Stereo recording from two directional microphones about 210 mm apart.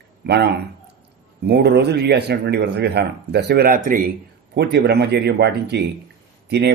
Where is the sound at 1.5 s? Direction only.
55° right (ahead or behind).